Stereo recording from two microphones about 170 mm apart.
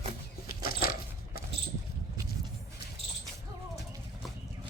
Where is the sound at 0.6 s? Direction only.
60° left (ahead or behind).